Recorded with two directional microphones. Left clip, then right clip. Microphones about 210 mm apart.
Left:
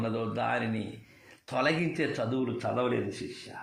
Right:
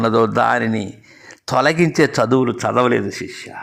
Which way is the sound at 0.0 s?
40° right (ahead or behind).